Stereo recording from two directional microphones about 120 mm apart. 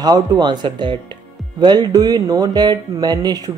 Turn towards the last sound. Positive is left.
turn(degrees=-35)  # may be behind; listen again after turning